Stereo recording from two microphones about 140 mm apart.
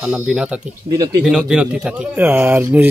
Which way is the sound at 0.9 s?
25° right (ahead or behind).